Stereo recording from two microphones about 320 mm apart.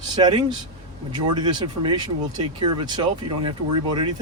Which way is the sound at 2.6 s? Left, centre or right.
Right.